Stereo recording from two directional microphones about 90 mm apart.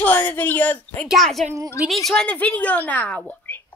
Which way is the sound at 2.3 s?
15° left (ahead or behind).